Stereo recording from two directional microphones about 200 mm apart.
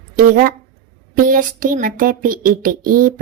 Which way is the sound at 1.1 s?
40° right (ahead or behind).